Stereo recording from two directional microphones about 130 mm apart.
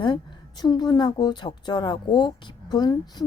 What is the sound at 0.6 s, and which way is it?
Speech, 30° left (ahead or behind).